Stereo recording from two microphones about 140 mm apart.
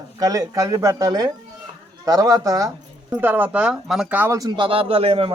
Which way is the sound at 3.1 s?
15° right (ahead or behind).